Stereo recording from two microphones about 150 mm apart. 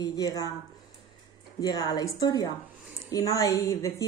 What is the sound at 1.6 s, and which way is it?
Speech, 25° left (ahead or behind).